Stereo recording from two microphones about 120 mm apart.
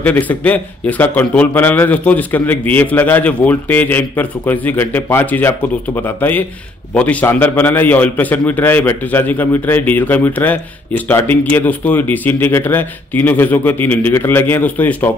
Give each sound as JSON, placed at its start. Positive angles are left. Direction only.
{"t": 0.0, "sound": "a man's voice", "side_deg": 15}